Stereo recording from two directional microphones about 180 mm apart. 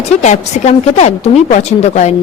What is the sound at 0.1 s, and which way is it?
A woman's voice, 40° left (ahead or behind).